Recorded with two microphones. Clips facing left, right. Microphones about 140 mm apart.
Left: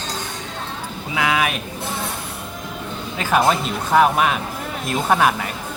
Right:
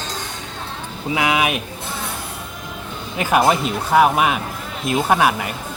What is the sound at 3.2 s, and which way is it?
Speech, 10° right (ahead or behind).